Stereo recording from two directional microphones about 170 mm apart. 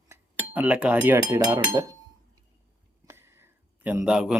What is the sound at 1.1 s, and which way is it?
Speech, 20° right (ahead or behind).